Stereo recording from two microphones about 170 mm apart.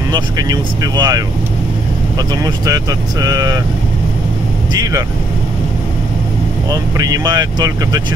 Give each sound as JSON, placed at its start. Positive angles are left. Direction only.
{"t": 0.1, "sound": "speech", "side_deg": -25}
{"t": 7.0, "sound": "speech", "side_deg": -20}